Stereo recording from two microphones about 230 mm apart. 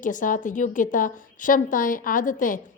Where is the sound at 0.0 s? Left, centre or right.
Left.